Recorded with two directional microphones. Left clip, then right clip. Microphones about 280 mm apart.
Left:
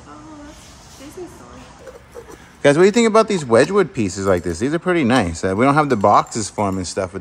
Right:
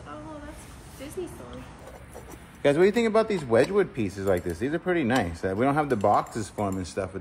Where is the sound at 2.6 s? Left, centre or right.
Left.